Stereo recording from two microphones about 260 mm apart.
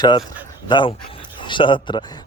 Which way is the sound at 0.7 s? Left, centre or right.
Centre.